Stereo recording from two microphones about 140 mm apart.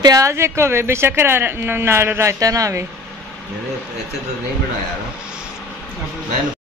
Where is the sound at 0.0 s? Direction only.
25° right (ahead or behind).